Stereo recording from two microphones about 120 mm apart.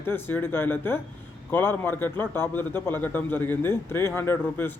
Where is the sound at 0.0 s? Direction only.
15° left (ahead or behind).